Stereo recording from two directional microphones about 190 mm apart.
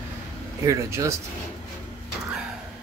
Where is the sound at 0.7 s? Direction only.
15° right (ahead or behind).